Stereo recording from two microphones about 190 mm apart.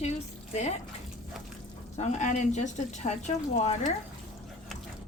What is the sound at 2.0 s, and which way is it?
A woman's voice, 40° left (ahead or behind).